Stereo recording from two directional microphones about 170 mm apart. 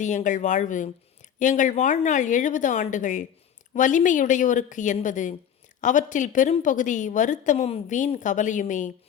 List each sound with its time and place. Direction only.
0.0 s a woman's voice: 45° left (ahead or behind)